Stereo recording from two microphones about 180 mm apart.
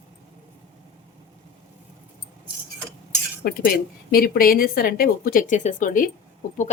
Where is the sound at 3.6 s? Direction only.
55° left (ahead or behind).